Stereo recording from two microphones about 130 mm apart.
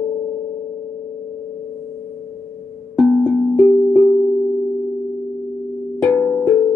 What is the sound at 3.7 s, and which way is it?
Music, centre (ahead or behind).